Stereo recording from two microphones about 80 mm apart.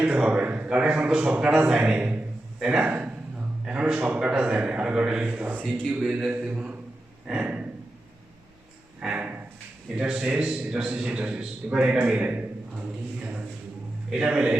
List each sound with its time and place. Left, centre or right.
0.0 s a man's voice: centre
7.3 s a sound: centre
9.0 s a man's voice: centre